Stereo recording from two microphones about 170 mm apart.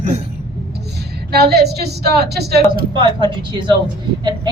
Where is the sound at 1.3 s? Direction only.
70° right (ahead or behind).